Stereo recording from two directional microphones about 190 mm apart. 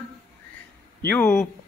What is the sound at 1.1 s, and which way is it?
Speech, 10° left (ahead or behind).